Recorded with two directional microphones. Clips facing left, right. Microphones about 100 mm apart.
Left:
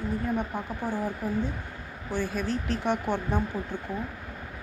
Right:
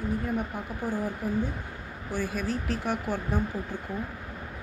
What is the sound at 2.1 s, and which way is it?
Speech, 10° right (ahead or behind).